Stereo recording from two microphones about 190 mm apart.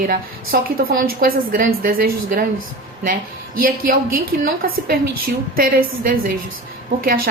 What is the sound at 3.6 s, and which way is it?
A woman's voice, 45° right (ahead or behind).